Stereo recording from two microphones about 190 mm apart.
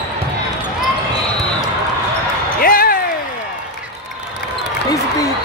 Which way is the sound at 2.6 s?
50° left (ahead or behind).